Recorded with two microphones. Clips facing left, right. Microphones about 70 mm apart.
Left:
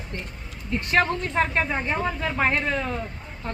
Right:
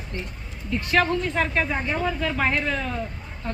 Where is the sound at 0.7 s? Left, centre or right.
Left.